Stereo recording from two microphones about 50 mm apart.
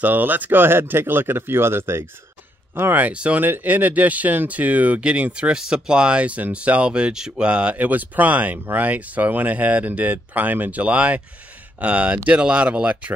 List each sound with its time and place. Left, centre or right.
0.0 s speech: right
2.9 s speech: right
7.7 s speech: right